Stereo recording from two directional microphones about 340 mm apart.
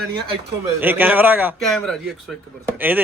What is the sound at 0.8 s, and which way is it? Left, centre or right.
A man's voice, centre.